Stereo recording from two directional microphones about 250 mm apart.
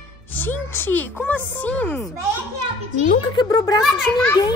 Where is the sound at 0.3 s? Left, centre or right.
Centre.